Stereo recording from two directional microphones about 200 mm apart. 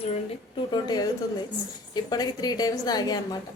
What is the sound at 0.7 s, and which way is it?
A woman's voice, 20° left (ahead or behind).